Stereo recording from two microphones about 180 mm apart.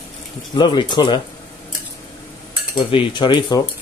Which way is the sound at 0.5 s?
25° left (ahead or behind).